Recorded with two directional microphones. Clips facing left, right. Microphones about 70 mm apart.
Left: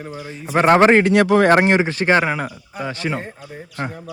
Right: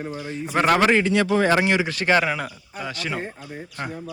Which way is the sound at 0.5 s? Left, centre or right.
Left.